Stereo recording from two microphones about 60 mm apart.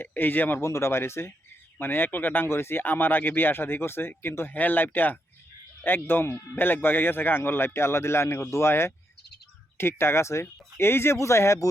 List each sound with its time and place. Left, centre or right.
0.0 s speech: left
0.6 s speech: left
1.8 s speech: left